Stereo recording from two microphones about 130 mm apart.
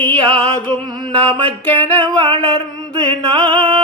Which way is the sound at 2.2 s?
40° right (ahead or behind).